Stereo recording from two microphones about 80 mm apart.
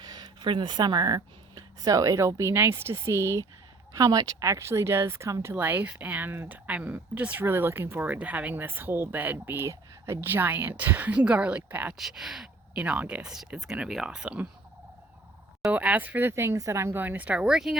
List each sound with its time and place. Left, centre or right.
0.0 s speech: right
3.9 s speech: right
5.5 s a woman's voice: right
6.3 s speech: right
6.7 s a woman's voice: centre
11.9 s speech: centre
12.8 s speech: centre
15.7 s a woman's voice: centre; by 17.0 s right
17.0 s speech: right